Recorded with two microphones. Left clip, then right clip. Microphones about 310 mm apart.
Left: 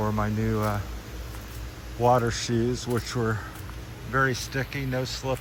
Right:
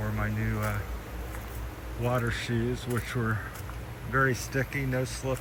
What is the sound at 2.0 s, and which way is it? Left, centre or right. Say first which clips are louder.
Speech: left 8 dB; centre.